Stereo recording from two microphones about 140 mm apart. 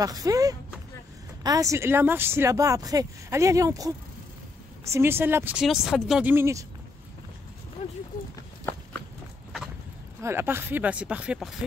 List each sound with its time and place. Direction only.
0.0 s a woman's voice: 25° right (ahead or behind); by 6.2 s centre (ahead or behind)
6.2 s a woman's voice: 20° right (ahead or behind)
10.2 s a woman's voice: 15° right (ahead or behind)